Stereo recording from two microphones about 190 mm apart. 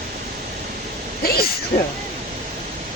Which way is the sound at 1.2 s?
55° left (ahead or behind).